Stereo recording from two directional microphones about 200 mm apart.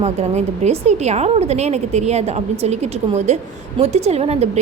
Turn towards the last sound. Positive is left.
turn(degrees=-30)  # may be behind; listen again after turning